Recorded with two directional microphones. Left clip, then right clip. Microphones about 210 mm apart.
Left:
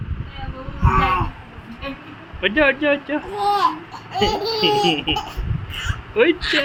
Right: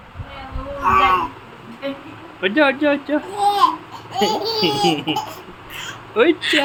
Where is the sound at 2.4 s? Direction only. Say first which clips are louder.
Right 1 dB; 25° right (ahead or behind).